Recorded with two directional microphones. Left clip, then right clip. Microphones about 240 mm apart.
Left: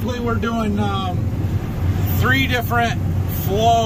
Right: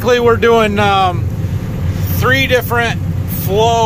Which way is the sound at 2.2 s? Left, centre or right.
Centre.